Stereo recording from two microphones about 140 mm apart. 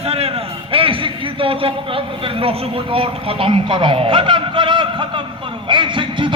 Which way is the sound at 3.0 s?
40° right (ahead or behind).